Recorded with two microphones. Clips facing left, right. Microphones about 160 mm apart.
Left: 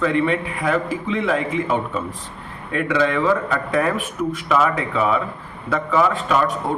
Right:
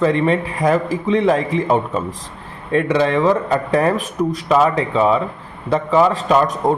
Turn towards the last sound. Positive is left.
turn(degrees=-40)  # may be behind; listen again after turning